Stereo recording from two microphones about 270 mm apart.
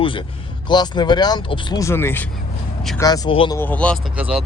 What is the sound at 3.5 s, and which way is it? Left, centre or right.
Speech, centre.